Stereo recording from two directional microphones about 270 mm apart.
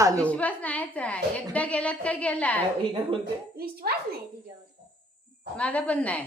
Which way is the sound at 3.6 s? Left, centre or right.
Right.